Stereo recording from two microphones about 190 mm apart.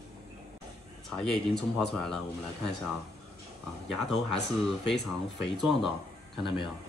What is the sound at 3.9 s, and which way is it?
Speech, centre (ahead or behind).